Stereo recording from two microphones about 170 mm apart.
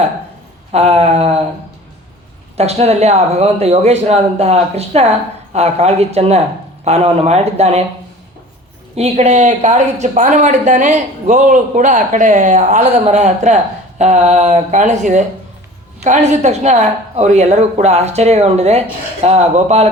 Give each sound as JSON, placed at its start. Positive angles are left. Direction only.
{"t": 0.7, "sound": "speech", "side_deg": -35}
{"t": 2.6, "sound": "speech", "side_deg": -40}
{"t": 9.0, "sound": "speech", "side_deg": -40}